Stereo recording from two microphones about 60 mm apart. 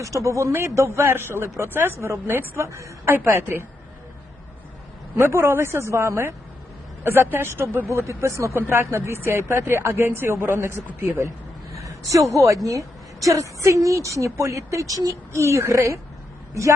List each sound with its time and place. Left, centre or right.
0.0 s a woman's voice: right
5.1 s speech: right
8.7 s a woman's voice: right
11.7 s a sound: right
12.6 s a woman's voice: right
15.3 s a woman's voice: right